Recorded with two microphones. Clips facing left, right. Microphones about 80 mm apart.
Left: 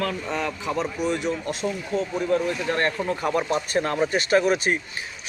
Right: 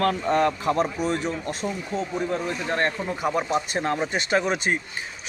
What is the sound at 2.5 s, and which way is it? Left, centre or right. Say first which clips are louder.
Speech: left 1 dB; right.